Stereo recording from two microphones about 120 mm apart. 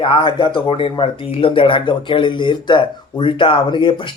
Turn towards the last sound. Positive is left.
turn(degrees=40)  # may be behind; listen again after turning